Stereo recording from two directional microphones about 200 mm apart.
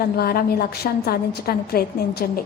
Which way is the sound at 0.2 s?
50° left (ahead or behind).